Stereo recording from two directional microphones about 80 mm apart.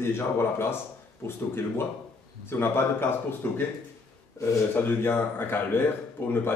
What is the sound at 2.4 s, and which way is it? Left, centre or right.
A man's voice, left.